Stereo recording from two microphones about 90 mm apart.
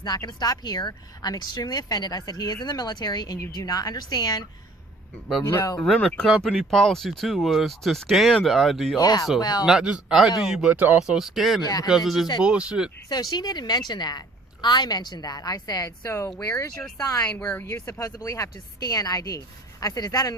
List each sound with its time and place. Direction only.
0.0 s speech: 45° left (ahead or behind)
5.8 s speech: 5° left (ahead or behind)
9.0 s speech: 45° left (ahead or behind)
9.6 s speech: 10° right (ahead or behind)
10.8 s speech: 20° right (ahead or behind)
11.0 s speech: 5° right (ahead or behind)
11.6 s speech: 45° left (ahead or behind)
11.9 s speech: centre (ahead or behind)
13.1 s speech: 50° left (ahead or behind)
16.0 s a woman's voice: 30° left (ahead or behind)
17.2 s a woman's voice: 15° left (ahead or behind)
17.7 s speech: 30° left (ahead or behind)
18.1 s speech: 40° left (ahead or behind)